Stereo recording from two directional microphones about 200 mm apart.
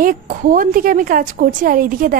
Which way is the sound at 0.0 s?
45° right (ahead or behind).